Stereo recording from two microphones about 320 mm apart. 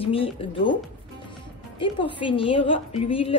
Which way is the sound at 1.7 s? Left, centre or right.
Centre.